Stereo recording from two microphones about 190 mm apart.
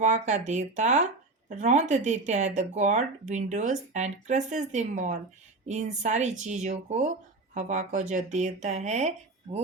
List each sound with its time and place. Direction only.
0.0 s speech: 40° right (ahead or behind)